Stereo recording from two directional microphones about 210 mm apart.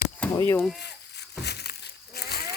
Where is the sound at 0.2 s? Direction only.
15° left (ahead or behind).